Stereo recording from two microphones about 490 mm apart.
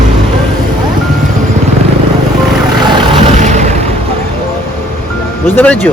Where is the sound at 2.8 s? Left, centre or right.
Centre.